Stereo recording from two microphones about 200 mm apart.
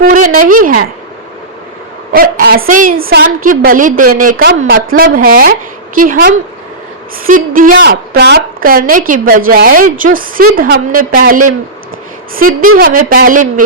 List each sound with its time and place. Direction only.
0.0 s a woman's voice: 45° right (ahead or behind)
2.1 s a woman's voice: 50° right (ahead or behind)